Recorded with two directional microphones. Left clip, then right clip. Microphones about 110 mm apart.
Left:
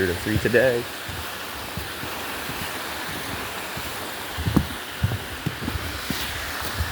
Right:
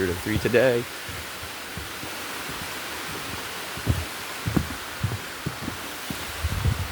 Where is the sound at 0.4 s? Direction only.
75° right (ahead or behind).